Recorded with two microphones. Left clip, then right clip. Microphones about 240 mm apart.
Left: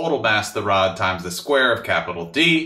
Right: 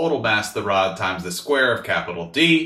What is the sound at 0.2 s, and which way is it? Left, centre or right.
Speech, left.